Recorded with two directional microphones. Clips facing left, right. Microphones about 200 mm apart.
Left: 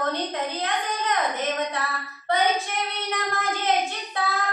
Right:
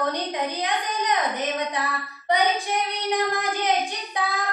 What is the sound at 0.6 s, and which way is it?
A child's voice, 15° right (ahead or behind).